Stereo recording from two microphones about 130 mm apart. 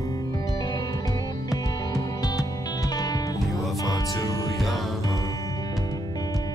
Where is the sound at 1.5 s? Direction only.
30° left (ahead or behind).